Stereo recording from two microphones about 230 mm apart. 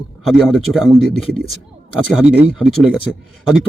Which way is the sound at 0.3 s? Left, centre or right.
Centre.